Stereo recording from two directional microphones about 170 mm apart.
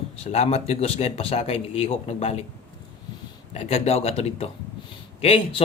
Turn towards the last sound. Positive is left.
turn(degrees=35)  # may be behind; listen again after turning